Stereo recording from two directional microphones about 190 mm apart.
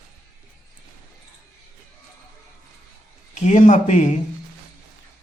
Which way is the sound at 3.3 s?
40° left (ahead or behind).